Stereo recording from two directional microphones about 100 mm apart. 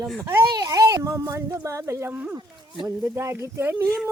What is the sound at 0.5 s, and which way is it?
Speech, 40° right (ahead or behind).